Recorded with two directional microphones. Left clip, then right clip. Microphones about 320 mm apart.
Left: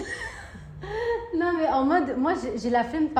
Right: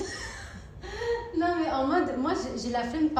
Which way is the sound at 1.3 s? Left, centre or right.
Left.